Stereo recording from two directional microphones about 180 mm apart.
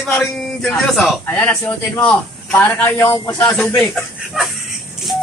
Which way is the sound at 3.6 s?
5° left (ahead or behind).